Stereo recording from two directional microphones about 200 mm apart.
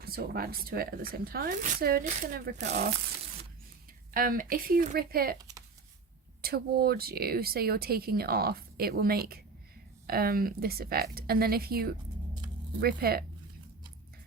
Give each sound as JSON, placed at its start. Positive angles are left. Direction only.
{"t": 0.0, "sound": "speech", "side_deg": -50}
{"t": 4.1, "sound": "speech", "side_deg": -45}
{"t": 5.4, "sound": "a sound", "side_deg": -15}
{"t": 6.4, "sound": "speech", "side_deg": -50}